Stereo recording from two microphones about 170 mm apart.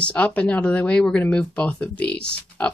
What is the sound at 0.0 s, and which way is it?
Speech, 10° left (ahead or behind).